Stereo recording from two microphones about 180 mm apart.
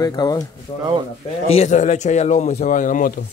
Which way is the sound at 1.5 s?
40° left (ahead or behind).